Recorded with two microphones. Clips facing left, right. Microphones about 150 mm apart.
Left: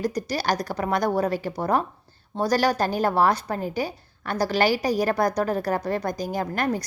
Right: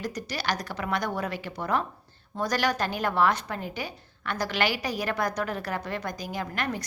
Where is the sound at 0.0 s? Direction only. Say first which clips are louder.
Left 6 dB; 35° left (ahead or behind).